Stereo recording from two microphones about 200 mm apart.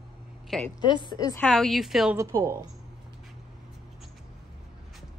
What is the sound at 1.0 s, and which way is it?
Speech, 20° left (ahead or behind).